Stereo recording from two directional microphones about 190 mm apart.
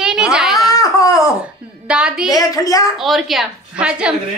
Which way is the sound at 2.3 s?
20° left (ahead or behind).